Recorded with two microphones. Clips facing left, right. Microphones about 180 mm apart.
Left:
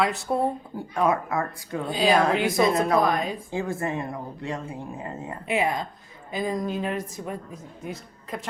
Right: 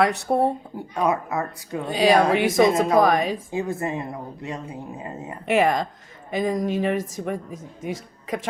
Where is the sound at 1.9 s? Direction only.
75° right (ahead or behind).